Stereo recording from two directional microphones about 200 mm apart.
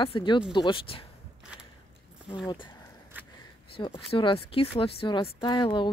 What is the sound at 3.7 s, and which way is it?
Speech, 25° left (ahead or behind).